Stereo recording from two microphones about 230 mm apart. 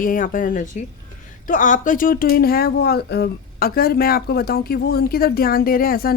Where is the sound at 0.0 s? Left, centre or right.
Left.